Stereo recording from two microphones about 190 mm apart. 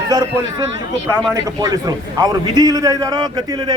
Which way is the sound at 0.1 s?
20° right (ahead or behind).